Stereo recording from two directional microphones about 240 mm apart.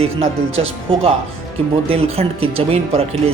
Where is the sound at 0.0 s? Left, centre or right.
Right.